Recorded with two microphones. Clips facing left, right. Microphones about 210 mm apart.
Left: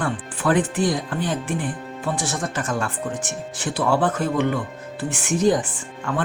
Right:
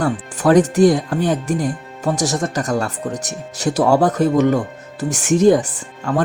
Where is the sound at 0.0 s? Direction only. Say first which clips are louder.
Right 6 dB; 40° right (ahead or behind).